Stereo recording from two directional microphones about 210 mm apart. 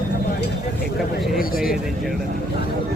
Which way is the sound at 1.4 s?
45° left (ahead or behind).